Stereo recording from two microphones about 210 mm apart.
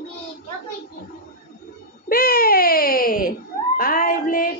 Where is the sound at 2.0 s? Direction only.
45° left (ahead or behind).